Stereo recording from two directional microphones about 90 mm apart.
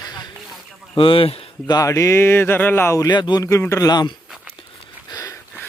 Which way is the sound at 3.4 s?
30° left (ahead or behind).